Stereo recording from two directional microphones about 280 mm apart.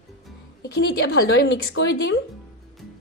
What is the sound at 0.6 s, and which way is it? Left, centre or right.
A woman's voice, left.